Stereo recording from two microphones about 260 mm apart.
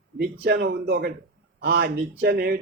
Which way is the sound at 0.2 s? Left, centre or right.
Right.